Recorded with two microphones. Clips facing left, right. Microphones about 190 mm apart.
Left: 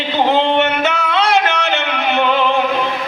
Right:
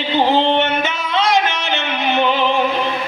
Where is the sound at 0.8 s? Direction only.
70° left (ahead or behind).